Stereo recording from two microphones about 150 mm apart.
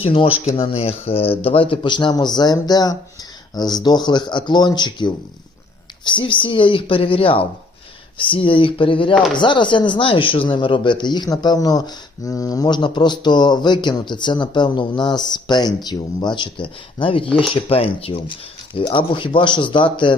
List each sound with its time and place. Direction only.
0.0 s speech: 40° left (ahead or behind)
17.2 s speech: 5° left (ahead or behind)
17.5 s speech: 40° left (ahead or behind)